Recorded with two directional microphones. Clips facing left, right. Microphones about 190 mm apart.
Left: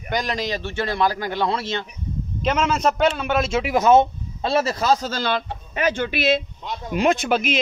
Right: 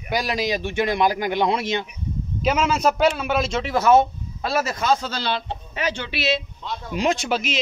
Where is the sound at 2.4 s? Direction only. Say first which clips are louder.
Even; 5° right (ahead or behind).